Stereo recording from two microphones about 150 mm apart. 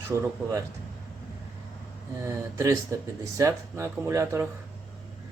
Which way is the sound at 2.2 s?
20° right (ahead or behind).